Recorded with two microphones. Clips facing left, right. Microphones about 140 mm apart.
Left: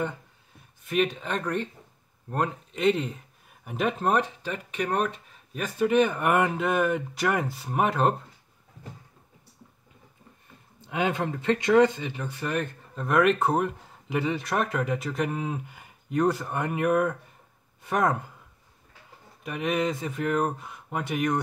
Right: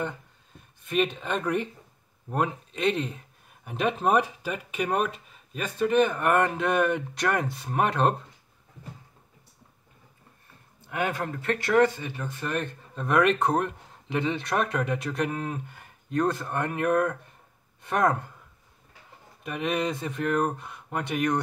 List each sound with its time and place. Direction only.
0.8 s speech: centre (ahead or behind)
5.8 s speech: 10° left (ahead or behind)
10.9 s speech: 20° left (ahead or behind); by 18.3 s 5° left (ahead or behind)
19.4 s speech: centre (ahead or behind)